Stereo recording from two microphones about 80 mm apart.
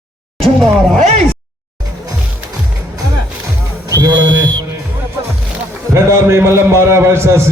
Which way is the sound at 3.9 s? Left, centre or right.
Right.